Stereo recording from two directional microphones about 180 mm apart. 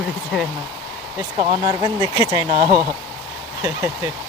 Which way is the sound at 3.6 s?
10° right (ahead or behind).